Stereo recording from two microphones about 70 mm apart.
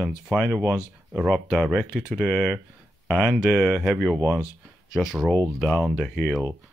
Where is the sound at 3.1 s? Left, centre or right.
Centre.